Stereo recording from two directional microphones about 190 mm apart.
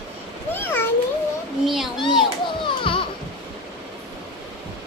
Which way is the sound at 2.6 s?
25° left (ahead or behind).